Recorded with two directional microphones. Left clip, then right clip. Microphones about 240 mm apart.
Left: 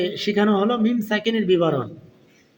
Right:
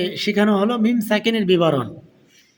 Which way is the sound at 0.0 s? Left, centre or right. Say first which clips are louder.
Right 1 dB; right.